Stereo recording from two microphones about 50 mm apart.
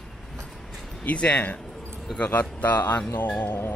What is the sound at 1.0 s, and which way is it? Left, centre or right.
Speech, left.